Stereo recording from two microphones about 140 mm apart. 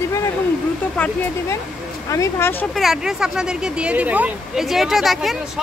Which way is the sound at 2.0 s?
20° left (ahead or behind).